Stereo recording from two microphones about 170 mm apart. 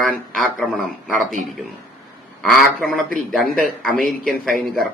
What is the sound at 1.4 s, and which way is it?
Speech, 50° right (ahead or behind).